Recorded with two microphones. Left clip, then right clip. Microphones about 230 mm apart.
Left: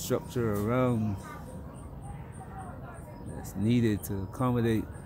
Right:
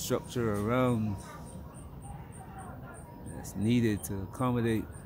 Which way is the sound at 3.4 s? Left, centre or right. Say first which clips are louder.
Left 1 dB; centre.